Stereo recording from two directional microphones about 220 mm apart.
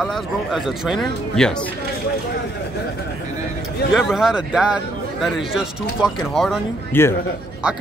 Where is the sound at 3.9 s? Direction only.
Centre (ahead or behind).